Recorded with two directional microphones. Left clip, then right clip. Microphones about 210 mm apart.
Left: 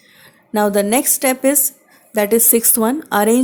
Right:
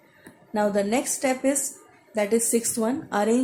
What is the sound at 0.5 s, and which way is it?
Speech, 50° left (ahead or behind).